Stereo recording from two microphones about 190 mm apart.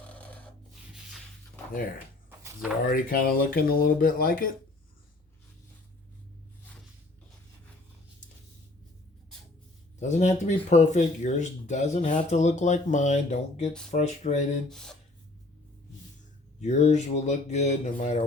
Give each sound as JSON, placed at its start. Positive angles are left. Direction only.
{"t": 0.1, "sound": "snort", "side_deg": 5}
{"t": 2.8, "sound": "speech", "side_deg": 50}
{"t": 10.0, "sound": "speech", "side_deg": 40}
{"t": 14.7, "sound": "speech", "side_deg": 5}
{"t": 16.6, "sound": "speech", "side_deg": 35}